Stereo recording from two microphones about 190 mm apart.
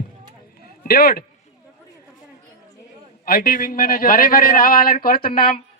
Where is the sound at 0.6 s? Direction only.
50° left (ahead or behind).